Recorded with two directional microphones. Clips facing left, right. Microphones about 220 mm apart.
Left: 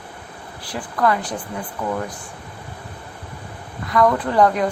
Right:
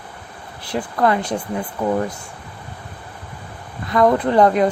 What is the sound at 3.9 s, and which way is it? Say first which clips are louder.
Speech: right 3 dB; 25° right (ahead or behind).